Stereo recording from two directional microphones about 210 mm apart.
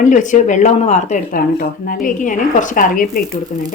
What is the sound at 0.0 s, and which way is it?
Speech, 35° left (ahead or behind).